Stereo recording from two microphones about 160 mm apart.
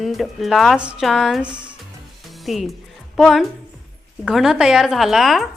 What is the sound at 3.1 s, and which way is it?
Speech, centre (ahead or behind).